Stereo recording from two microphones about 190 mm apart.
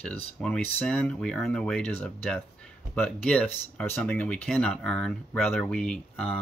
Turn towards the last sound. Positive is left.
turn(degrees=5)  # may be behind; listen again after turning